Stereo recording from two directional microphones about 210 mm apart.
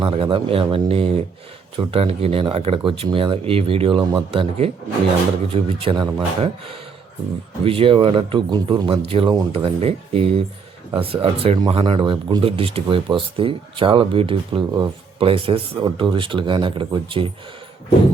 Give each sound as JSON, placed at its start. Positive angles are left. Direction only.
{"t": 0.0, "sound": "speech", "side_deg": -25}